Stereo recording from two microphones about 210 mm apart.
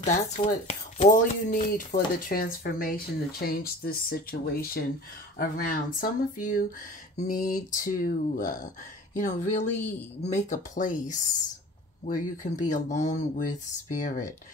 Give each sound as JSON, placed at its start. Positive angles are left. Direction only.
{"t": 0.0, "sound": "speech", "side_deg": 35}